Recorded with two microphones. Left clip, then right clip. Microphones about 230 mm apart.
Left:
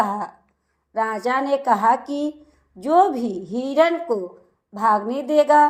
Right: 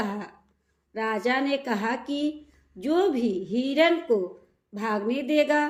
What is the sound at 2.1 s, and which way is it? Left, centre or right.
A woman's voice, centre.